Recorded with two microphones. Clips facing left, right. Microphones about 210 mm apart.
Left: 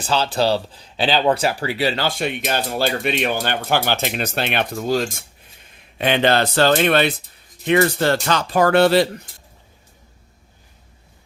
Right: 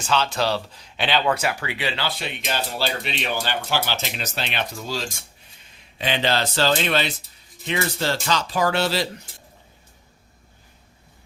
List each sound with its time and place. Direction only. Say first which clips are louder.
0.0 s speech: left 3 dB; 35° left (ahead or behind); by 9.0 s 55° left (ahead or behind)